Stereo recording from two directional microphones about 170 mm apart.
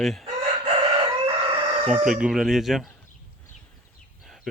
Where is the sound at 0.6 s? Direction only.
30° right (ahead or behind).